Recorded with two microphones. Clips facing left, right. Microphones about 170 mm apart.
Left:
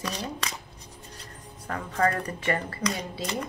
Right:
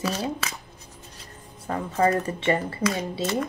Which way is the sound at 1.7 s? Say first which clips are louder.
Right 4 dB; 25° right (ahead or behind).